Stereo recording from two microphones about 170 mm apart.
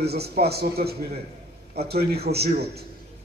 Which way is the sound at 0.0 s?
70° right (ahead or behind).